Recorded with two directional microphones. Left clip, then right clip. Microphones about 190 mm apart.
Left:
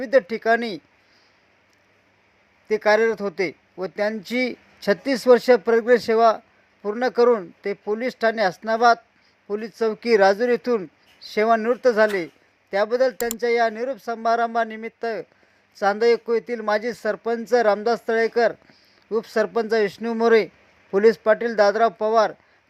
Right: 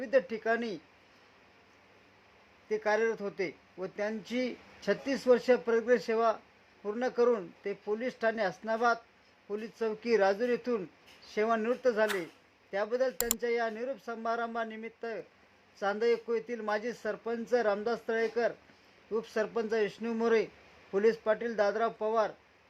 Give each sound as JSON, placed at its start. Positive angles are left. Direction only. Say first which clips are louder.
{"t": 0.0, "sound": "speech", "louder": "left 10 dB", "side_deg": 35}
{"t": 2.6, "sound": "speech", "louder": "left 11 dB", "side_deg": 30}
{"t": 13.1, "sound": "speech", "louder": "left 9 dB", "side_deg": 0}
{"t": 13.4, "sound": "speech", "louder": "left 13 dB", "side_deg": 35}